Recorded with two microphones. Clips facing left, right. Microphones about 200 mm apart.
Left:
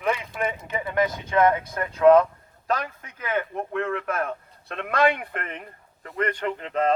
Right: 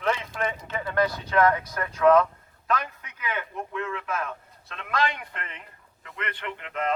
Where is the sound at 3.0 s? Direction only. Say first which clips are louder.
Left 5 dB; 50° left (ahead or behind).